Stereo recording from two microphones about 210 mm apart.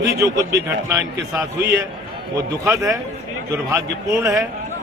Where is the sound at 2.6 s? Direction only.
15° right (ahead or behind).